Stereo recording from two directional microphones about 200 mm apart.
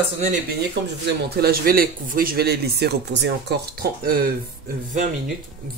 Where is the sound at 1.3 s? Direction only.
50° right (ahead or behind).